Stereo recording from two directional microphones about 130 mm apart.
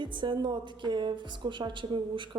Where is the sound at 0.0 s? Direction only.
35° right (ahead or behind).